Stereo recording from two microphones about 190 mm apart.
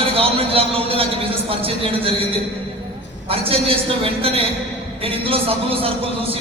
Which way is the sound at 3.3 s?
30° right (ahead or behind).